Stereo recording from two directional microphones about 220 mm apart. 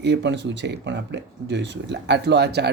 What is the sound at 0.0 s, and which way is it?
Speech, 50° right (ahead or behind).